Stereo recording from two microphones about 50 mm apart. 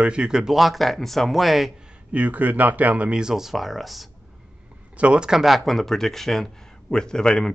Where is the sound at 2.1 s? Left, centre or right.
Right.